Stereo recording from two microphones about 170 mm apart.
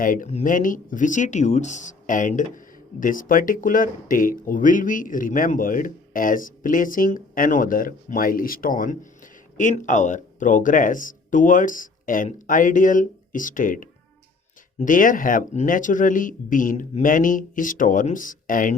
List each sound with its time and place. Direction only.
0.0 s speech: 50° left (ahead or behind)